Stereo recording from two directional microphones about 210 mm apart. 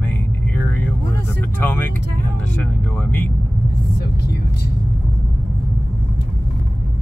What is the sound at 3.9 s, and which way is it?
Speech, 50° left (ahead or behind).